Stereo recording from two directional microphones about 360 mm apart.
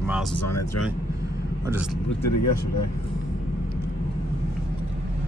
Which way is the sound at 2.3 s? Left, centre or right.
Left.